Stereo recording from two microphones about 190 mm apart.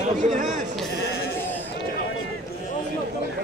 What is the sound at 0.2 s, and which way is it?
Speech, 40° right (ahead or behind).